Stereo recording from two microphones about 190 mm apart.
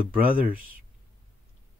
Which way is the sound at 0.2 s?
45° right (ahead or behind).